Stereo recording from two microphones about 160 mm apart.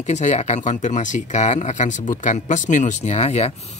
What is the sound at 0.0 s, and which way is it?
Speech, 45° left (ahead or behind).